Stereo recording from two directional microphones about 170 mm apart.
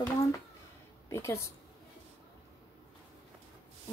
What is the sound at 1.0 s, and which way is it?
Speech, 15° left (ahead or behind).